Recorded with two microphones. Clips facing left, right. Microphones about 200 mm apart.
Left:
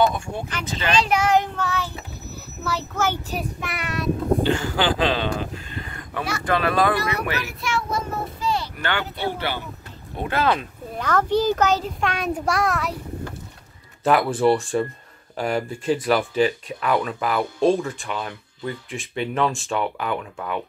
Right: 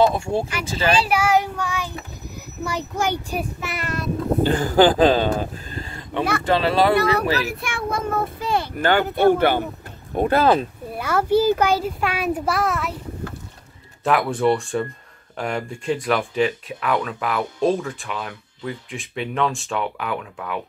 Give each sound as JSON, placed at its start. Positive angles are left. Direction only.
{"t": 0.0, "sound": "speech", "side_deg": -30}
{"t": 0.8, "sound": "a child's voice", "side_deg": -10}
{"t": 4.4, "sound": "speech", "side_deg": -40}
{"t": 7.6, "sound": "a child's voice", "side_deg": -55}
{"t": 10.1, "sound": "speech", "side_deg": -40}
{"t": 11.0, "sound": "a child's voice", "side_deg": -10}
{"t": 14.0, "sound": "speech", "side_deg": 0}